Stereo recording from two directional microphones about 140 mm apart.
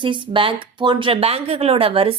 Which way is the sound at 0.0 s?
35° right (ahead or behind).